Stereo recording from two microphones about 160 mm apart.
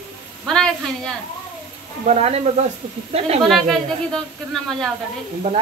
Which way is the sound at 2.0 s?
40° right (ahead or behind).